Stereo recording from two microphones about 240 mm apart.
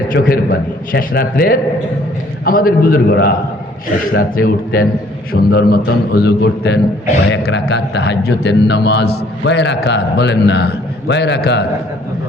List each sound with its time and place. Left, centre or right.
0.1 s a man's voice: left